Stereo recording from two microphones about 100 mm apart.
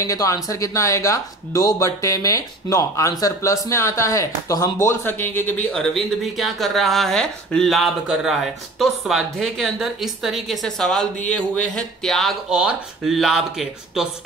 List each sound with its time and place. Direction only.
0.0 s speech: 35° left (ahead or behind); by 5.7 s 20° left (ahead or behind)
5.7 s speech: 5° left (ahead or behind)